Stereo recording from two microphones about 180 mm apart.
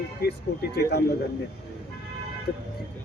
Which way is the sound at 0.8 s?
60° left (ahead or behind).